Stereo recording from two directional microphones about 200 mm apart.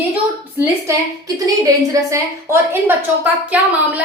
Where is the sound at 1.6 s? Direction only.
15° right (ahead or behind).